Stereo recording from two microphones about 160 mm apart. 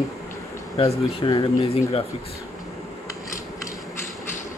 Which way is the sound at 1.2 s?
30° left (ahead or behind).